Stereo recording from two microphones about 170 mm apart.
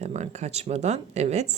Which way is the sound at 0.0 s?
40° right (ahead or behind).